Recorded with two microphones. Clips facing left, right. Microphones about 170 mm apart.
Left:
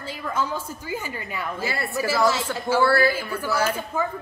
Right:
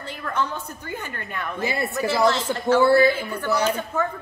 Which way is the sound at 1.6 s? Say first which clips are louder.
Right 3 dB; 20° right (ahead or behind).